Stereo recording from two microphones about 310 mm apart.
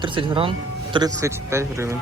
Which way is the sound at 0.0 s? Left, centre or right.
Centre.